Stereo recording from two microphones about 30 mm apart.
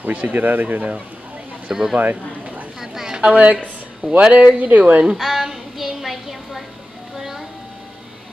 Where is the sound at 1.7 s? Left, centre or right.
Right.